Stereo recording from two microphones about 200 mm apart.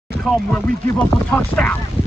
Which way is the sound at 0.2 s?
Centre (ahead or behind).